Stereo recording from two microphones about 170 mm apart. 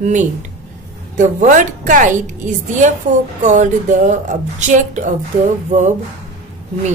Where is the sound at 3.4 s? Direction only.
45° right (ahead or behind).